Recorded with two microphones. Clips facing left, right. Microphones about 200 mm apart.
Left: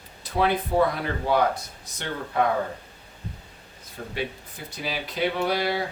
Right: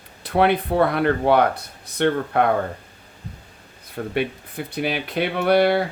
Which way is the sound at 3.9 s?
60° right (ahead or behind).